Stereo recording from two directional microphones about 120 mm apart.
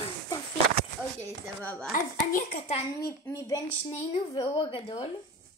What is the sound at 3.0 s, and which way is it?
Speech, 30° left (ahead or behind).